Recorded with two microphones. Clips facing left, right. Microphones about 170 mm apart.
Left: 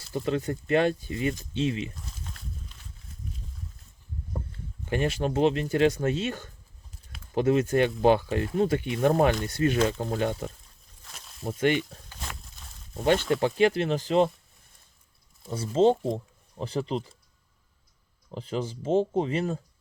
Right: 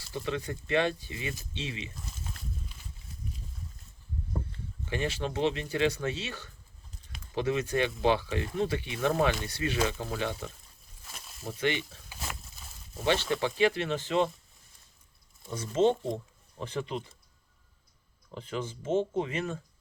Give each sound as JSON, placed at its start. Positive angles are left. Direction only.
{"t": 0.1, "sound": "speech", "side_deg": 45}
{"t": 2.0, "sound": "a sound", "side_deg": 0}
{"t": 4.9, "sound": "speech", "side_deg": 45}
{"t": 11.0, "sound": "snake", "side_deg": -5}
{"t": 11.4, "sound": "speech", "side_deg": 50}
{"t": 12.0, "sound": "a sound", "side_deg": -5}
{"t": 12.9, "sound": "speech", "side_deg": 50}
{"t": 15.4, "sound": "speech", "side_deg": 30}
{"t": 18.3, "sound": "speech", "side_deg": 35}